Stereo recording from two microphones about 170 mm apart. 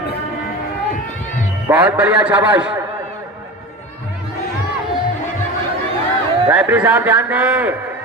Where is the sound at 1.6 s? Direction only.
10° right (ahead or behind).